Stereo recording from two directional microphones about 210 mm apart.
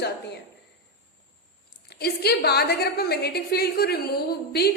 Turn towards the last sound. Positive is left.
turn(degrees=50)  # may be behind; listen again after turning